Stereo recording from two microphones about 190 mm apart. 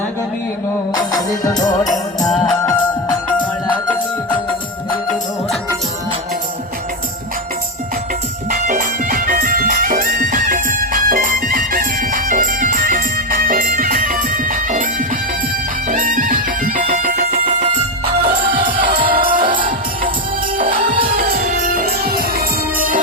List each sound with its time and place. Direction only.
0.9 s music: 20° left (ahead or behind)
2.2 s music: centre (ahead or behind)
8.4 s music: 45° right (ahead or behind)
18.4 s music: 50° right (ahead or behind)